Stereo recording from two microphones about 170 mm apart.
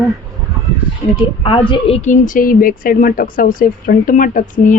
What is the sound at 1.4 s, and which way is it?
A woman's voice, 30° left (ahead or behind).